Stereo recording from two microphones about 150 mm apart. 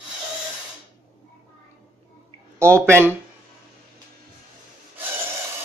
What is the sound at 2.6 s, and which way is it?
Speech, 15° right (ahead or behind).